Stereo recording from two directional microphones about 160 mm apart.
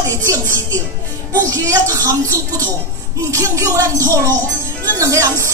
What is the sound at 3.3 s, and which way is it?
Speech, 20° right (ahead or behind).